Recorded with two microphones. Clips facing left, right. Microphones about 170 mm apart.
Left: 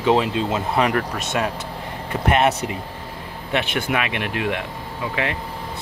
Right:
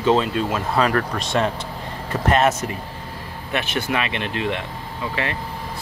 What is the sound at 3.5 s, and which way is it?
Speech, 15° left (ahead or behind).